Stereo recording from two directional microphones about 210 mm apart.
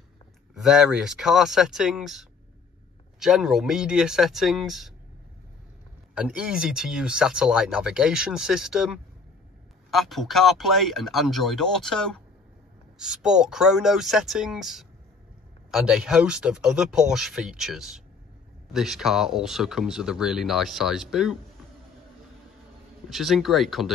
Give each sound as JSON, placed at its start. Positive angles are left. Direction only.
{"t": 0.6, "sound": "speech", "side_deg": 0}
{"t": 6.1, "sound": "speech", "side_deg": -5}
{"t": 23.0, "sound": "speech", "side_deg": 0}